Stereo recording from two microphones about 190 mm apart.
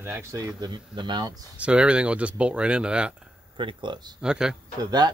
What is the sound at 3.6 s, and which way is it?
Speech, 25° right (ahead or behind).